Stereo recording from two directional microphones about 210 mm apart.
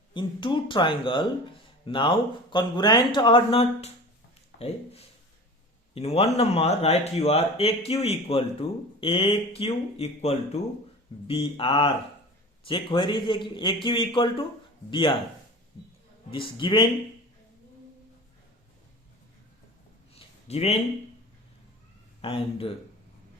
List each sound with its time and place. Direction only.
0.1 s speech: 25° left (ahead or behind)
16.3 s speech: 25° left (ahead or behind)
20.1 s a sound: 30° left (ahead or behind)
22.2 s speech: 25° left (ahead or behind)